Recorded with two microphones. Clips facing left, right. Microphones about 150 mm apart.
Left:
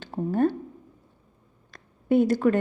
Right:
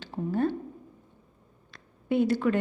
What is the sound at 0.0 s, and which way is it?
Speech, 50° left (ahead or behind).